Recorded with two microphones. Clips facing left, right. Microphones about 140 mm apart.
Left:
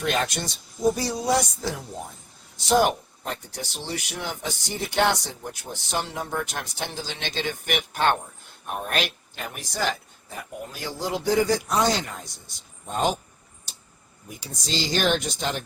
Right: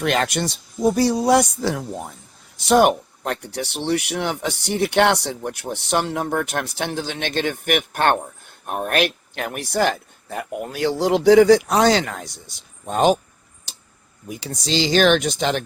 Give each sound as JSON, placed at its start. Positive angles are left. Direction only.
{"t": 0.0, "sound": "a man's voice", "side_deg": -70}
{"t": 14.3, "sound": "speech", "side_deg": -80}